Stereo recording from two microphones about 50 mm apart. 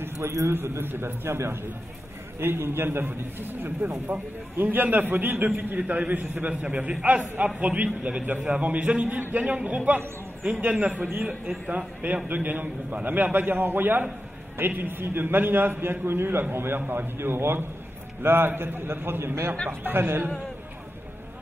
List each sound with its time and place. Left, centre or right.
0.0 s a man's voice: right
0.6 s a man's voice: right